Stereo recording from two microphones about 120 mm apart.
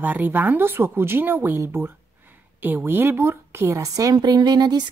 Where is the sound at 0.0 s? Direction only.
15° right (ahead or behind).